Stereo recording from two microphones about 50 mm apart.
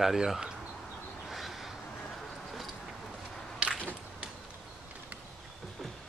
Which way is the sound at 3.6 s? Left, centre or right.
Right.